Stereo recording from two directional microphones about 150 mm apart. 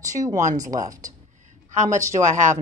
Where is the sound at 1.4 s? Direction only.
55° right (ahead or behind).